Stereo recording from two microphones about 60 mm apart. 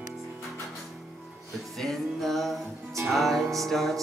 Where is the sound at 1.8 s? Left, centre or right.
Centre.